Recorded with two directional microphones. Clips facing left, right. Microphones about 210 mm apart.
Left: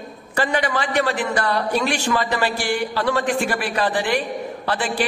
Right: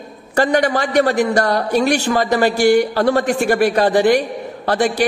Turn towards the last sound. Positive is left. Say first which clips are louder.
# right 7 dB
turn(degrees=-40)  # may be behind; listen again after turning